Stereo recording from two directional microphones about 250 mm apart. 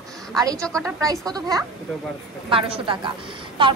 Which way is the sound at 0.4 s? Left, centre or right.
Centre.